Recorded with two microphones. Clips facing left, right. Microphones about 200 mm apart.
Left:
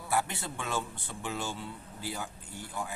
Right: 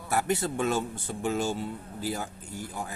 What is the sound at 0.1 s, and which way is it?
Speech, 40° right (ahead or behind).